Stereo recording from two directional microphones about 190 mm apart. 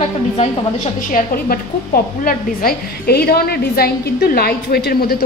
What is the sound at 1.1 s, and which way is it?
A woman's voice, 50° left (ahead or behind).